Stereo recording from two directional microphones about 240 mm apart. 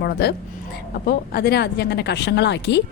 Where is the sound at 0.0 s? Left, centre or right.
Left.